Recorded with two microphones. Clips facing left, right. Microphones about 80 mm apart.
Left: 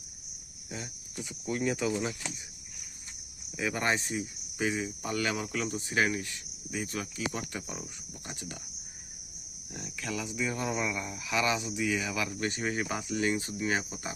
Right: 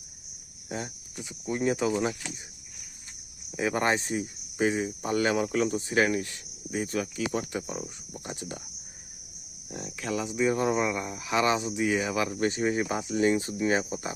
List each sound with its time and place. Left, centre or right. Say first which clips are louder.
1.5 s speech: right 4 dB; right
3.6 s speech: right 4 dB; right
9.7 s speech: right 5 dB; right